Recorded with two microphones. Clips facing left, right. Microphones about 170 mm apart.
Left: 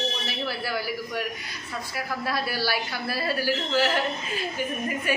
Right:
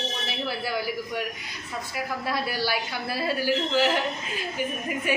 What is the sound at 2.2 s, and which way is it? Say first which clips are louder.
A man's voice: even; 20° right (ahead or behind).